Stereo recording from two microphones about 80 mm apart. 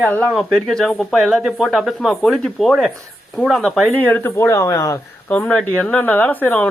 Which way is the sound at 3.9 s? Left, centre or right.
Left.